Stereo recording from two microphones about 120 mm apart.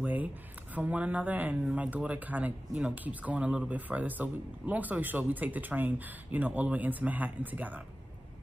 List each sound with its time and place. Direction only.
0.0 s speech: 15° right (ahead or behind)